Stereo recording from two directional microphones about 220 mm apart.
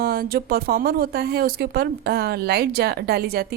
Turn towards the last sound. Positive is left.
turn(degrees=-45)  # may be behind; listen again after turning